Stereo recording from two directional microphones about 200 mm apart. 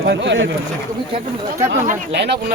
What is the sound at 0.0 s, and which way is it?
Speech, 60° right (ahead or behind).